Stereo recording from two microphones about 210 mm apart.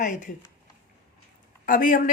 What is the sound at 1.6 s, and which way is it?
Speech, 40° left (ahead or behind).